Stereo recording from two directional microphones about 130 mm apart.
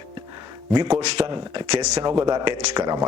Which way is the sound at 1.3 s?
35° right (ahead or behind).